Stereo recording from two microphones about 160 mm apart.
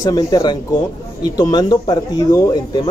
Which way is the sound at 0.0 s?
25° left (ahead or behind).